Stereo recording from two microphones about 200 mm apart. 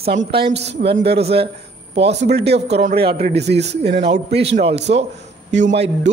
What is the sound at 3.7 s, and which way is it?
Speech, 60° right (ahead or behind).